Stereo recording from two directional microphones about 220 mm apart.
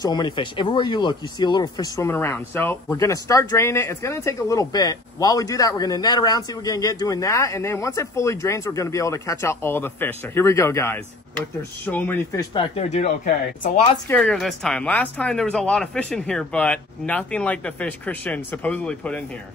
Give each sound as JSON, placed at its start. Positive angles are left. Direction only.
{"t": 0.0, "sound": "speech", "side_deg": 20}
{"t": 12.7, "sound": "speech", "side_deg": 30}
{"t": 14.0, "sound": "a woman's voice", "side_deg": 5}